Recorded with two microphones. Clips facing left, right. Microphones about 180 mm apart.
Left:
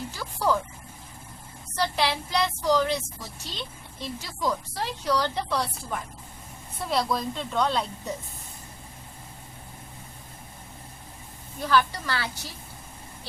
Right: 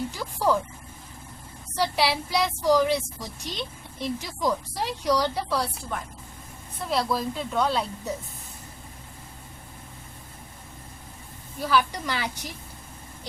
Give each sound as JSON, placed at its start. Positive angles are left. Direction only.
{"t": 0.1, "sound": "a woman's voice", "side_deg": -15}
{"t": 1.7, "sound": "a woman's voice", "side_deg": -10}
{"t": 11.6, "sound": "a woman's voice", "side_deg": -10}